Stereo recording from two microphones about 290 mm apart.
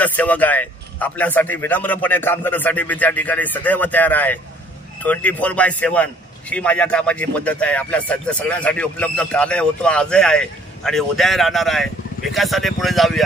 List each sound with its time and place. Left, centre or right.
0.0 s speech: centre